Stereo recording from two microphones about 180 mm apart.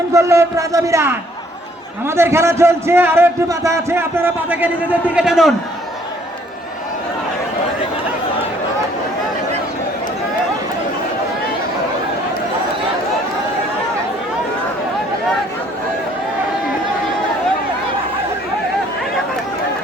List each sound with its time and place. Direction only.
0.1 s a man's voice: 15° right (ahead or behind)